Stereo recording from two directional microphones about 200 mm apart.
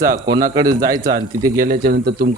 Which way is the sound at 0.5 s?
15° right (ahead or behind).